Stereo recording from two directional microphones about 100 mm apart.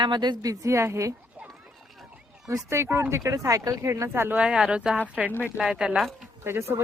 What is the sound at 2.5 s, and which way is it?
A woman's voice, 30° right (ahead or behind).